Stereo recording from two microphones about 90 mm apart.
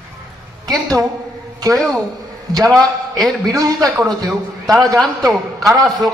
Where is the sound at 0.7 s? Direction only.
40° right (ahead or behind).